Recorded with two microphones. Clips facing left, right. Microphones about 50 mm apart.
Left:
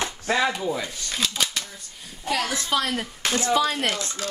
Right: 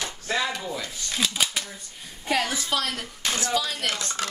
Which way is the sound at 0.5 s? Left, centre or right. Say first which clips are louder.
Left 5 dB; centre.